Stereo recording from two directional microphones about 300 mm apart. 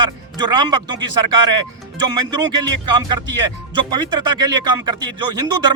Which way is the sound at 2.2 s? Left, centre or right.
Centre.